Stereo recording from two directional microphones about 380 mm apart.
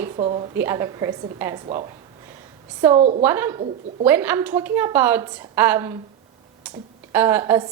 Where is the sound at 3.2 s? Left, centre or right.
Centre.